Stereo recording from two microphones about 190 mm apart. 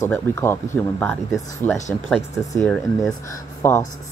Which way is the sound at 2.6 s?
Centre (ahead or behind).